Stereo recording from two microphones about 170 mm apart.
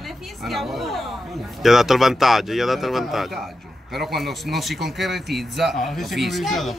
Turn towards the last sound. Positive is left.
turn(degrees=0)  # may be behind; listen again after turning